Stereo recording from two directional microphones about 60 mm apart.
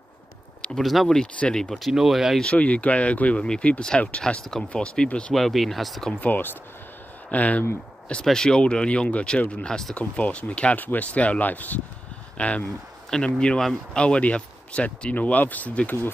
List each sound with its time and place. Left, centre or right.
0.7 s speech: centre
1.8 s speech: centre
2.4 s speech: left
5.3 s speech: centre
6.2 s speech: left
8.1 s speech: centre